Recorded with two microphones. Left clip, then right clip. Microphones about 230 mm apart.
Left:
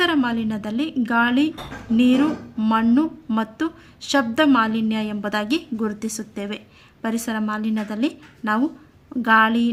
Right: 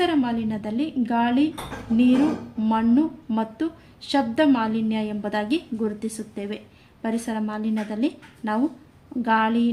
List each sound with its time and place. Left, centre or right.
0.0 s a woman's voice: left